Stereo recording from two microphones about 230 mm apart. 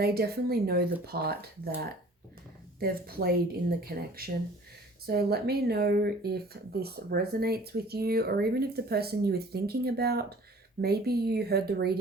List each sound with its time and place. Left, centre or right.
0.0 s speech: right